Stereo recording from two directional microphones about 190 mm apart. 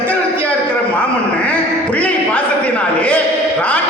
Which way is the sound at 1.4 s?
10° left (ahead or behind).